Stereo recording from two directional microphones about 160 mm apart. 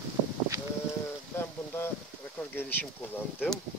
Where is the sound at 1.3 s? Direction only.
15° left (ahead or behind).